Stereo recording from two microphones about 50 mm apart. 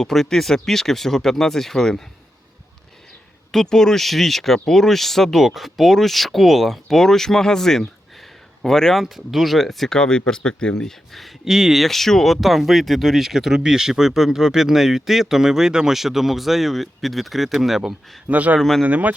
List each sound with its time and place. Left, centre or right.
0.0 s speech: centre
3.5 s speech: centre
9.0 s speech: centre
11.1 s speech: centre
11.4 s speech: centre
11.9 s speech: centre
18.3 s speech: right